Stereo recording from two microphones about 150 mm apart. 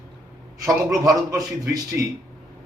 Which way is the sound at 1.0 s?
20° right (ahead or behind).